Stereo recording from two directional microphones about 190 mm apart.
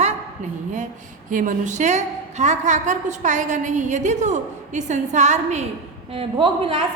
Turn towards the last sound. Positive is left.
turn(degrees=-25)  # may be behind; listen again after turning